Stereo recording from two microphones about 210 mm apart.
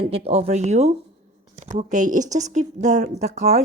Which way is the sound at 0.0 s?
25° right (ahead or behind).